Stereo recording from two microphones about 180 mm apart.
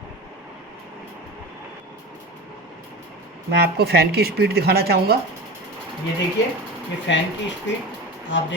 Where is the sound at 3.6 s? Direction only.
65° right (ahead or behind).